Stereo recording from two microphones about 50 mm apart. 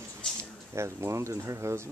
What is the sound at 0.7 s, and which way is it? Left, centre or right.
Speech, right.